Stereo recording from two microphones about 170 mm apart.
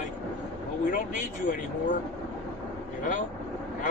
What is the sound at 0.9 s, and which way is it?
Speech, 50° left (ahead or behind).